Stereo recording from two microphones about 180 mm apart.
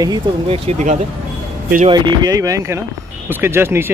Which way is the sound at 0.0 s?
25° right (ahead or behind).